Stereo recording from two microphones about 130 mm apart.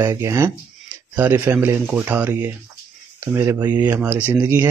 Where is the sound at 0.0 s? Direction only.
25° right (ahead or behind).